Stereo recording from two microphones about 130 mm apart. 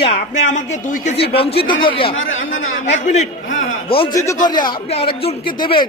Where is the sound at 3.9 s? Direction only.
45° left (ahead or behind).